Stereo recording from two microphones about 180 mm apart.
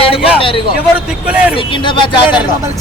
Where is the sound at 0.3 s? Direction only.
30° left (ahead or behind).